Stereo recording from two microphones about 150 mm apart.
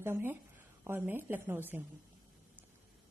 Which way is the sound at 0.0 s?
15° right (ahead or behind).